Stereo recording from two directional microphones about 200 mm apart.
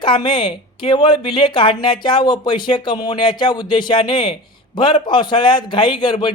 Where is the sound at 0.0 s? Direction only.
25° left (ahead or behind).